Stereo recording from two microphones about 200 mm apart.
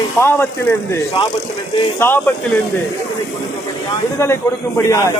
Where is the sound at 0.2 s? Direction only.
10° left (ahead or behind).